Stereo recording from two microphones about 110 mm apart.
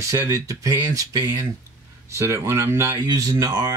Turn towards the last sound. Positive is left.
turn(degrees=-35)  # may be behind; listen again after turning